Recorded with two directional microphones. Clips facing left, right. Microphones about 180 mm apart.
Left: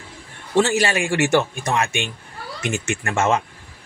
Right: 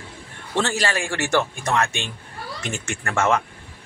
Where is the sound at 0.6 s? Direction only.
20° left (ahead or behind).